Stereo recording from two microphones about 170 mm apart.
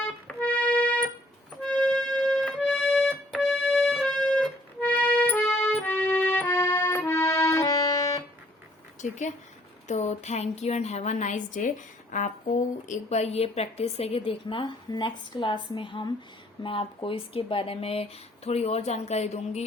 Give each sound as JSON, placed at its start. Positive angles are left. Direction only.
{"t": 0.3, "sound": "music", "side_deg": 5}
{"t": 4.8, "sound": "accordion", "side_deg": 10}
{"t": 9.0, "sound": "a sound", "side_deg": 45}
{"t": 9.8, "sound": "a woman's voice", "side_deg": 40}